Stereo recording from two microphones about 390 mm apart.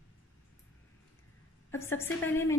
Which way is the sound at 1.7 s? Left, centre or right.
Centre.